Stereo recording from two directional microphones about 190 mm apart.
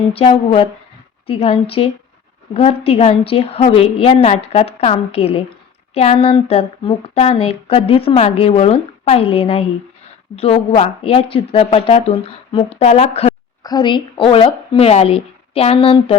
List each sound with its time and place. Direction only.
0.1 s a woman's voice: 30° left (ahead or behind)
13.6 s a woman's voice: 20° left (ahead or behind)